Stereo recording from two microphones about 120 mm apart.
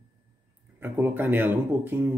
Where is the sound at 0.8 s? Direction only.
20° right (ahead or behind).